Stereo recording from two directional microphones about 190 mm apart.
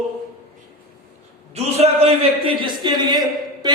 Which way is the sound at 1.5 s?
30° right (ahead or behind).